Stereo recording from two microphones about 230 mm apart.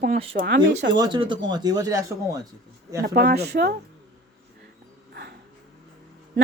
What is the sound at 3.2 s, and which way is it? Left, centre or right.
Speech, right.